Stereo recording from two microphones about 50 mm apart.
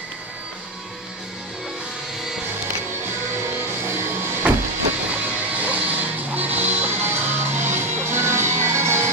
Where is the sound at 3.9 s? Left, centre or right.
Right.